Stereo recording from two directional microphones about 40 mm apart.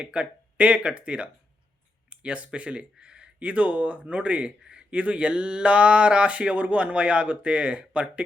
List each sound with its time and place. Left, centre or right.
0.0 s speech: right